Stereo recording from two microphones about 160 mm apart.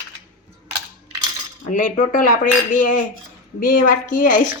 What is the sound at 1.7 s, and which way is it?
Speech, 55° left (ahead or behind).